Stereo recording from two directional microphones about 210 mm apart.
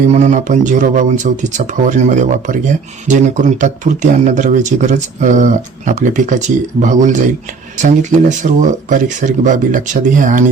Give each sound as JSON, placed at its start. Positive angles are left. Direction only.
{"t": 0.1, "sound": "speech", "side_deg": -35}